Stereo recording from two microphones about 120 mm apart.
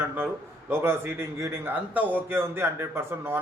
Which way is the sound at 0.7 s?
20° right (ahead or behind).